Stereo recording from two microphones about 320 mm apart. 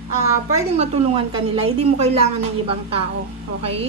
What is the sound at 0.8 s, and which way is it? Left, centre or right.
A woman's voice, centre.